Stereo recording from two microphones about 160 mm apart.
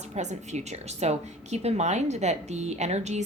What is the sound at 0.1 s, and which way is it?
A woman's voice, 45° right (ahead or behind).